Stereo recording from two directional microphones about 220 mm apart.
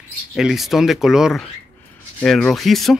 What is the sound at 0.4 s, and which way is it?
Speech, centre (ahead or behind).